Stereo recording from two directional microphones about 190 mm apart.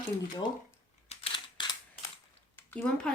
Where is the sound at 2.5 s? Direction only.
10° left (ahead or behind).